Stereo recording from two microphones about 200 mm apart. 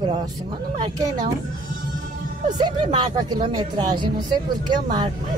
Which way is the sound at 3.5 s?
25° right (ahead or behind).